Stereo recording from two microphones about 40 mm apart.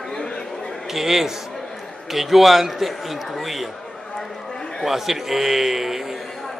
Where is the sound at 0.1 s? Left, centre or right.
Centre.